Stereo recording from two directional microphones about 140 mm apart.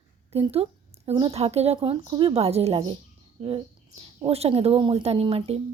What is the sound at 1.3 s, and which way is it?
Speech, 50° right (ahead or behind).